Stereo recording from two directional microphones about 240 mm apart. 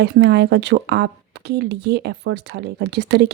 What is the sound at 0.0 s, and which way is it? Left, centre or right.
Speech, right.